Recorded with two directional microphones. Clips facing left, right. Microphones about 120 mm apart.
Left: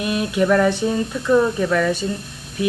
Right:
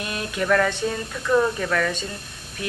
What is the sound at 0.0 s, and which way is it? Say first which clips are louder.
Speech: left 8 dB; 20° left (ahead or behind).